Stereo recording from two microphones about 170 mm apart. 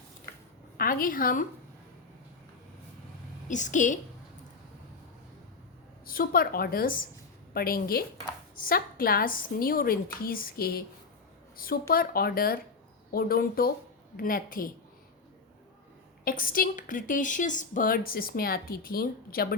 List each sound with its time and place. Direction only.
0.8 s a woman's voice: 55° left (ahead or behind)
3.5 s a woman's voice: 45° left (ahead or behind)
6.1 s a woman's voice: 60° left (ahead or behind)
16.2 s a woman's voice: 55° left (ahead or behind)